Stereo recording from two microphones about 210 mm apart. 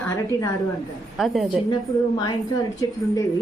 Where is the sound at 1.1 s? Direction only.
Centre (ahead or behind).